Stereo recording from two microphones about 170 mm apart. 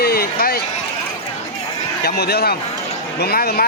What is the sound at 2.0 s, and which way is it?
Speech, 70° left (ahead or behind).